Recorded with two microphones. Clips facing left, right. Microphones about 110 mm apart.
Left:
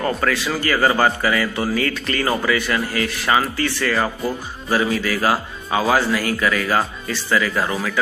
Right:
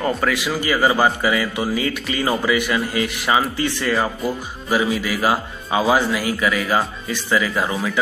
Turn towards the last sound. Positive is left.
turn(degrees=-15)  # may be behind; listen again after turning